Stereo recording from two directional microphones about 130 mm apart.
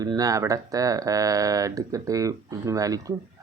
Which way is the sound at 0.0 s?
30° right (ahead or behind).